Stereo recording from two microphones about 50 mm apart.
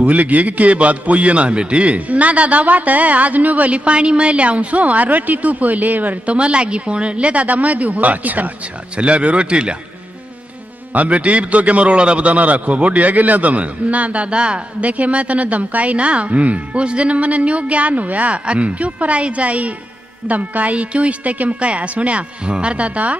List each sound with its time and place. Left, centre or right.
0.0 s a man's voice: right
10.9 s a man's voice: right